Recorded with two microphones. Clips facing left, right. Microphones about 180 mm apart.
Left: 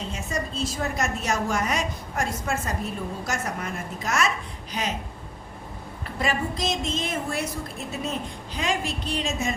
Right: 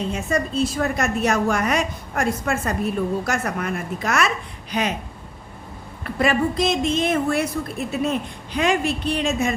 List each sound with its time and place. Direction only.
0.1 s a woman's voice: 60° right (ahead or behind)
6.1 s a woman's voice: 60° right (ahead or behind)